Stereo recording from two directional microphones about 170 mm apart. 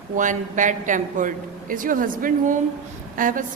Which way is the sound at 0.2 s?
50° right (ahead or behind).